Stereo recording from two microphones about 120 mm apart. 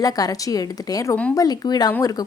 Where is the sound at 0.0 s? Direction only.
30° left (ahead or behind).